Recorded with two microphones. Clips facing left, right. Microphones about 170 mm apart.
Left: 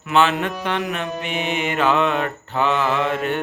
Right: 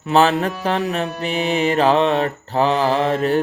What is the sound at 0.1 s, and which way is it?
Mantra, 35° right (ahead or behind).